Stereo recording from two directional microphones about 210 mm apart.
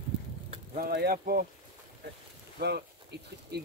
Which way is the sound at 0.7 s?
45° right (ahead or behind).